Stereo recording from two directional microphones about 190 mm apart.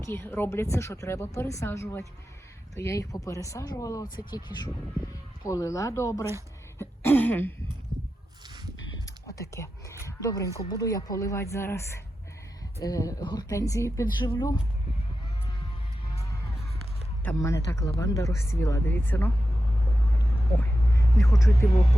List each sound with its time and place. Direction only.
0.0 s speech: 15° left (ahead or behind)
6.7 s throat clearing: 10° left (ahead or behind)
9.2 s speech: 15° left (ahead or behind)
17.2 s speech: 15° left (ahead or behind)
20.6 s vehicle: 15° left (ahead or behind)